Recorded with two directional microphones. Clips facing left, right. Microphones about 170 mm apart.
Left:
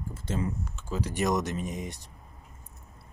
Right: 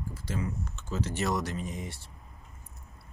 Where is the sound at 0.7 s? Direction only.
10° left (ahead or behind).